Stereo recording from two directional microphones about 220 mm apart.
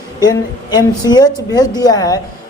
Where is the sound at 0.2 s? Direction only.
20° left (ahead or behind).